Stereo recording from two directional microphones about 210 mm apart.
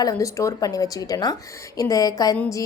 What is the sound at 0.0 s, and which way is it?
A woman's voice, 15° left (ahead or behind).